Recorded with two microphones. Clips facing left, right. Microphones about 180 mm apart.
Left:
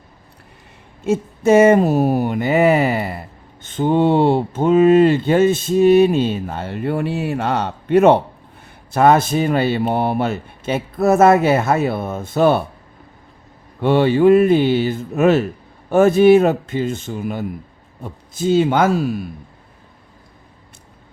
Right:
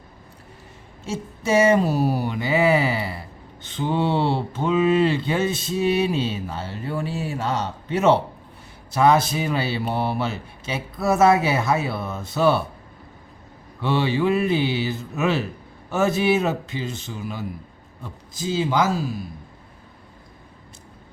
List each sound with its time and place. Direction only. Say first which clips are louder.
1.0 s speech: left 10 dB; 55° left (ahead or behind)
13.8 s a man's voice: left 8 dB; 50° left (ahead or behind)